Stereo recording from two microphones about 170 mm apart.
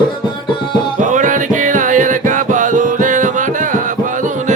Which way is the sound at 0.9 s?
50° right (ahead or behind).